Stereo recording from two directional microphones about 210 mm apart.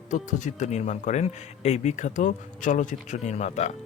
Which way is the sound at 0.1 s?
35° left (ahead or behind).